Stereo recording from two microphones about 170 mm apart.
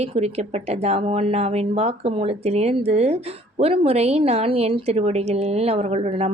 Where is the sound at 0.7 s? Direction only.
35° right (ahead or behind).